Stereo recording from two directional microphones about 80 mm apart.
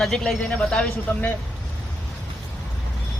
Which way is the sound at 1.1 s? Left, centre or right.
Left.